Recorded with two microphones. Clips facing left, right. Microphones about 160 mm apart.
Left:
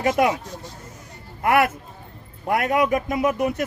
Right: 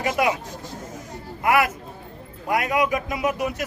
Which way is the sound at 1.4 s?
55° left (ahead or behind).